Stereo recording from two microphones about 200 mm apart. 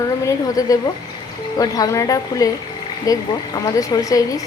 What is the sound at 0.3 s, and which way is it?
A woman's voice, 15° left (ahead or behind).